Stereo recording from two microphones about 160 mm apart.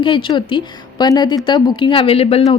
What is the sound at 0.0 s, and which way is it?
A woman's voice, 30° left (ahead or behind).